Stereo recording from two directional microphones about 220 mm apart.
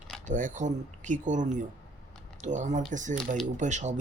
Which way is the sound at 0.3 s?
35° right (ahead or behind).